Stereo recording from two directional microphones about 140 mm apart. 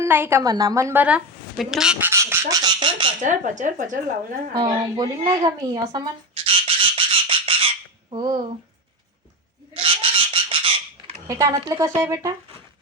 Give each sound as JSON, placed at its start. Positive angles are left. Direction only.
{"t": 0.0, "sound": "speech", "side_deg": -15}
{"t": 1.0, "sound": "speech", "side_deg": -5}
{"t": 2.0, "sound": "speech", "side_deg": -20}
{"t": 3.2, "sound": "speech", "side_deg": -65}
{"t": 4.5, "sound": "a sound", "side_deg": -30}
{"t": 8.1, "sound": "speech", "side_deg": -35}
{"t": 9.7, "sound": "a sound", "side_deg": -40}
{"t": 11.3, "sound": "speech", "side_deg": -25}